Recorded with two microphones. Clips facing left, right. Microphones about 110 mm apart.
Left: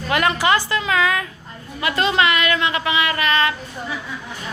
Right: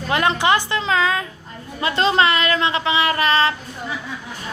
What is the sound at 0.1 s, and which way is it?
A woman's voice, 20° right (ahead or behind).